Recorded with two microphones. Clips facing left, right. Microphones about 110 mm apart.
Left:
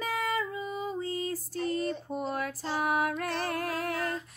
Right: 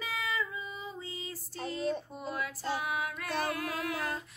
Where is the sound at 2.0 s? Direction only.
50° left (ahead or behind).